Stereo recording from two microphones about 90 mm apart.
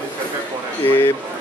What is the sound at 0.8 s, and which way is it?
Speech, 20° left (ahead or behind).